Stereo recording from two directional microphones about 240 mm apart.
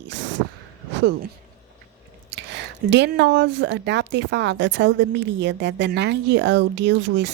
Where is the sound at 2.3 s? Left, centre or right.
Right.